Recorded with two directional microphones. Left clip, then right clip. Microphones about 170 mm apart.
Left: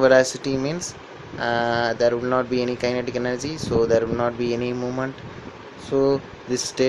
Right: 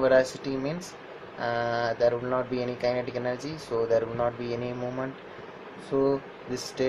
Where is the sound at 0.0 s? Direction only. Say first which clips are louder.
Left 6 dB; 45° left (ahead or behind).